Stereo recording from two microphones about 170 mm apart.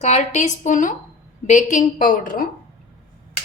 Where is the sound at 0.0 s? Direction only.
40° left (ahead or behind); by 2.5 s 55° left (ahead or behind).